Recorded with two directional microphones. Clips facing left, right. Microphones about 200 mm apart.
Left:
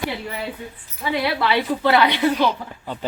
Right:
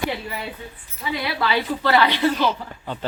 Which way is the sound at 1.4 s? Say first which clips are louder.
Left 2 dB; 15° left (ahead or behind).